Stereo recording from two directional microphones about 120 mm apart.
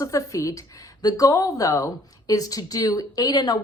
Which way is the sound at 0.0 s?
30° left (ahead or behind).